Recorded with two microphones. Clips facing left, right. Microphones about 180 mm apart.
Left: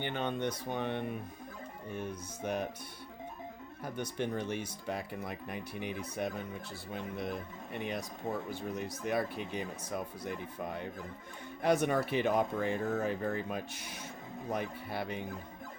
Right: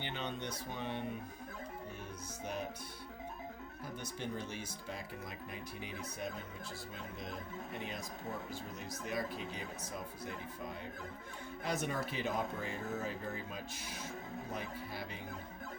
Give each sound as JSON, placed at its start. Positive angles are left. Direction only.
{"t": 0.0, "sound": "speech", "side_deg": 55}
{"t": 4.2, "sound": "speech", "side_deg": 60}